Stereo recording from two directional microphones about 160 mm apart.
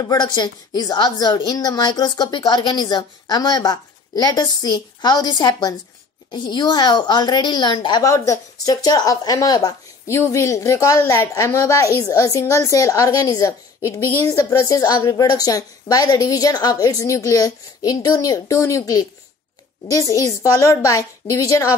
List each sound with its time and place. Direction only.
0.0 s a woman's voice: 25° left (ahead or behind)